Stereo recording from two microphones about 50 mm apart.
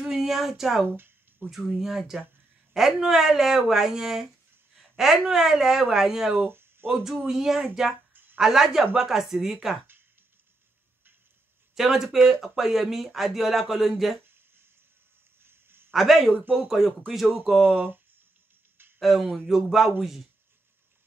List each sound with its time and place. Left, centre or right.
0.0 s speech: centre
0.8 s speech: right
1.5 s a woman's voice: centre
6.3 s a sound: right
7.2 s speech: centre
8.1 s a sound: right
8.4 s speech: centre
11.7 s speech: centre
15.4 s a sound: right
15.9 s speech: centre
17.7 s speech: right
18.9 s speech: centre